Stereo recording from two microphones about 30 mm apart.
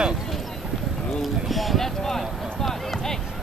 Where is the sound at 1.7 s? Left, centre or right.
Centre.